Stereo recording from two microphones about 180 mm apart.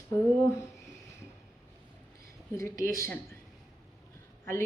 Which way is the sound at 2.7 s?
50° right (ahead or behind).